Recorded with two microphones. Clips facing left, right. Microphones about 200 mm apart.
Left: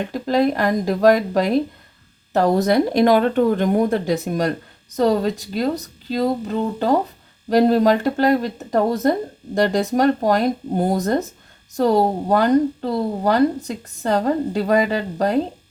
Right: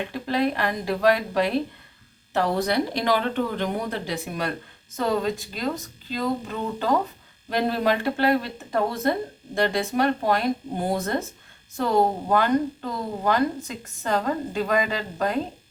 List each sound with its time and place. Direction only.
0.0 s speech: 45° left (ahead or behind)